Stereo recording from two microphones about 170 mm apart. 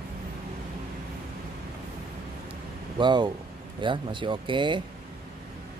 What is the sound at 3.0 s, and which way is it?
Speech, 25° right (ahead or behind).